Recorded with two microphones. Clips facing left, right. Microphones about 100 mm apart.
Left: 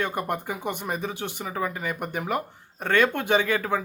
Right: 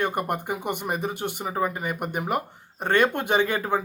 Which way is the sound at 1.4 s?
30° right (ahead or behind).